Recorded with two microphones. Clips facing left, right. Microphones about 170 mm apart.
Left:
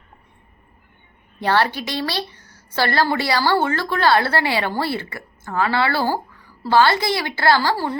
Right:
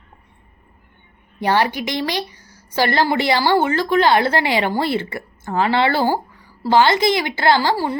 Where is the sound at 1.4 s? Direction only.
15° right (ahead or behind).